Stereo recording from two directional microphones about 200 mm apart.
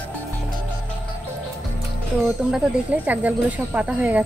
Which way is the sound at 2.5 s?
5° right (ahead or behind).